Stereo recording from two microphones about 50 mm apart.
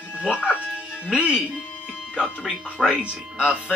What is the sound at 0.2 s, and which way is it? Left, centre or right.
Speech, centre.